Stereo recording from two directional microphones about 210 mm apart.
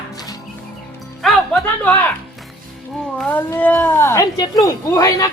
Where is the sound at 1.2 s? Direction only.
Centre (ahead or behind).